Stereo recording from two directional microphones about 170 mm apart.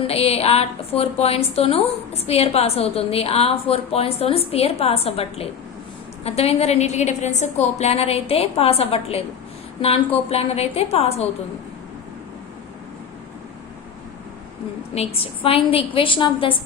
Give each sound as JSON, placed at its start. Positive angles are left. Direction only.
{"t": 0.1, "sound": "a woman's voice", "side_deg": 35}
{"t": 10.2, "sound": "a woman's voice", "side_deg": 35}
{"t": 14.9, "sound": "a woman's voice", "side_deg": 35}